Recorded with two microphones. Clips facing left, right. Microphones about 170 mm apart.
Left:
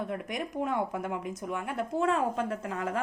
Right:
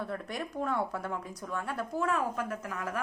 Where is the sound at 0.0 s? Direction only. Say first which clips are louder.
Left 2 dB; 15° left (ahead or behind).